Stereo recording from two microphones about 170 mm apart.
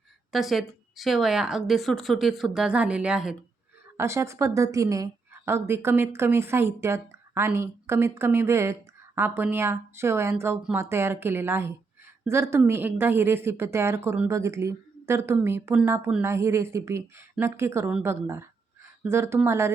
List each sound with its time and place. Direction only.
0.3 s a woman's voice: centre (ahead or behind)
3.9 s a woman's voice: 15° right (ahead or behind)